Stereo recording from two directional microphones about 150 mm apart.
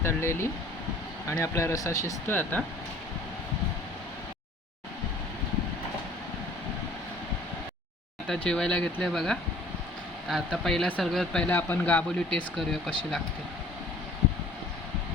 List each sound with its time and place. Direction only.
0.0 s speech: 15° left (ahead or behind)
8.3 s speech: 5° left (ahead or behind)